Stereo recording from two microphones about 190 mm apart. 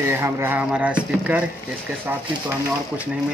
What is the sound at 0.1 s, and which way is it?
Speech, 10° right (ahead or behind).